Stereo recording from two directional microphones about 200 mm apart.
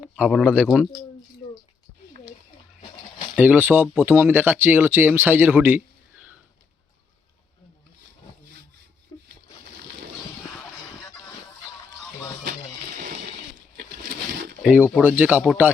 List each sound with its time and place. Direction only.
0.0 s speech: centre (ahead or behind)
3.3 s speech: 10° right (ahead or behind)
13.0 s a sound: 40° right (ahead or behind)
14.6 s speech: 5° right (ahead or behind)